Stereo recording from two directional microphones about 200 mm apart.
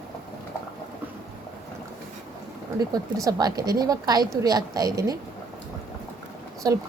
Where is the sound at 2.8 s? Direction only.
20° right (ahead or behind).